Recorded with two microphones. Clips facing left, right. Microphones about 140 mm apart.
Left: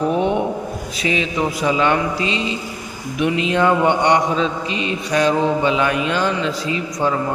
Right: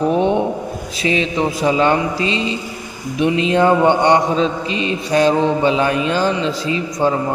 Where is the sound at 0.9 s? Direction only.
30° right (ahead or behind).